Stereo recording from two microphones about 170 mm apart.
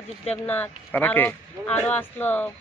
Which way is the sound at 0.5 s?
10° left (ahead or behind).